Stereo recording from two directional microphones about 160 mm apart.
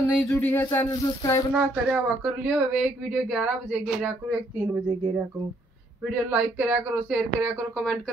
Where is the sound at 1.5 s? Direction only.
10° right (ahead or behind).